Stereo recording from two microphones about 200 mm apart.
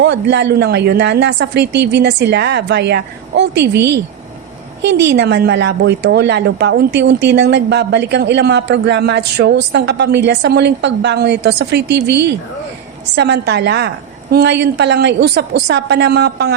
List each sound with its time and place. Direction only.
0.0 s speech: 60° right (ahead or behind)